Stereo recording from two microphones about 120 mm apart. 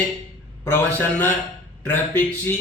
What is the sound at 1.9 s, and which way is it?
Speech, 15° left (ahead or behind).